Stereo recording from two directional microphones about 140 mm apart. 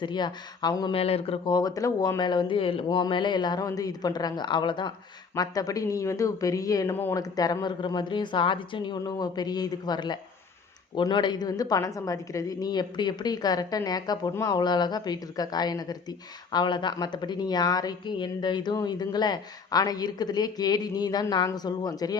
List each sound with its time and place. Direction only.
0.0 s speech: 35° left (ahead or behind)
1.5 s speech: 25° left (ahead or behind)
6.9 s speech: 15° left (ahead or behind)
7.2 s speech: 25° left (ahead or behind)